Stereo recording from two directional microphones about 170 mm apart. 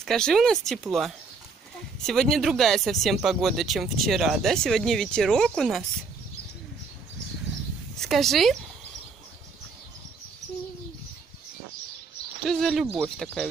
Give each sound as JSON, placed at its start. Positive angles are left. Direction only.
{"t": 0.0, "sound": "speech", "side_deg": 5}
{"t": 8.0, "sound": "speech", "side_deg": 0}
{"t": 12.4, "sound": "speech", "side_deg": 0}